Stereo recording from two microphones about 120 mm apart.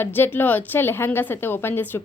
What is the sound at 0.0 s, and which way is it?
A woman's voice, 15° left (ahead or behind).